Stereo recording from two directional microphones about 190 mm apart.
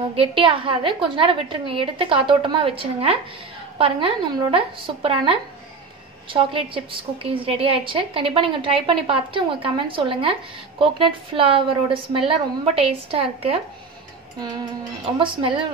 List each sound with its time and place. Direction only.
0.1 s a woman's voice: 30° right (ahead or behind)